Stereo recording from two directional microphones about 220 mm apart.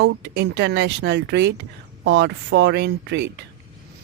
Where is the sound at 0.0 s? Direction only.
50° right (ahead or behind).